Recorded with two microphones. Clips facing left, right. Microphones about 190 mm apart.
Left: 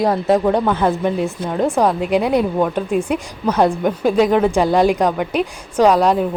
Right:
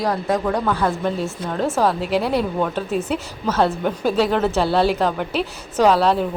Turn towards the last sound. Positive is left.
turn(degrees=10)  # may be behind; listen again after turning